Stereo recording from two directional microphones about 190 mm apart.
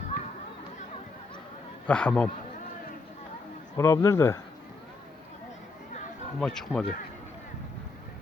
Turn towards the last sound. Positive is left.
turn(degrees=5)  # may be behind; listen again after turning